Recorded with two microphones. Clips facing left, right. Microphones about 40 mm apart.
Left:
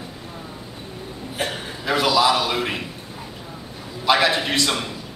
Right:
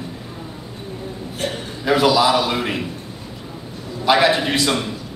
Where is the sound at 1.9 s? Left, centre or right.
Centre.